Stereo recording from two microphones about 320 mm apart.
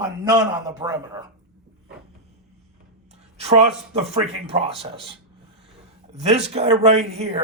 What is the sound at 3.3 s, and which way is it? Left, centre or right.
Speech, centre.